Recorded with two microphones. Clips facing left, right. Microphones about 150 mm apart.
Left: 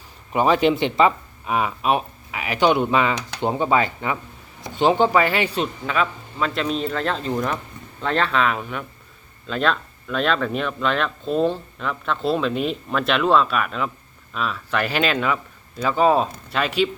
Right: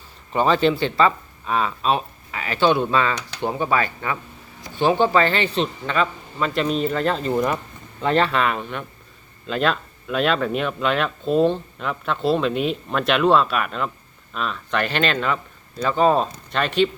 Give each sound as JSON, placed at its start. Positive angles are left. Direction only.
{"t": 0.3, "sound": "speech", "side_deg": 10}